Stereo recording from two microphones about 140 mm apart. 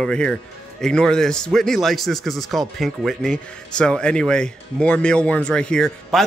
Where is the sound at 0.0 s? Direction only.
5° left (ahead or behind).